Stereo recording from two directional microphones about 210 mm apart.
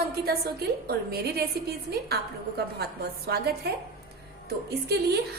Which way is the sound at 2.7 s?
50° right (ahead or behind).